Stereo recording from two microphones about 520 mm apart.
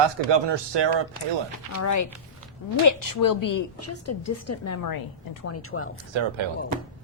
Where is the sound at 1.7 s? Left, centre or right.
Left.